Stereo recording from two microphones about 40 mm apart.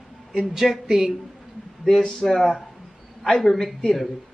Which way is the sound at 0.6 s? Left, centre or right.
Centre.